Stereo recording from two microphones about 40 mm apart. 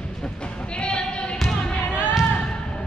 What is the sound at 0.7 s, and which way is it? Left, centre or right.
Basketball bounce, left.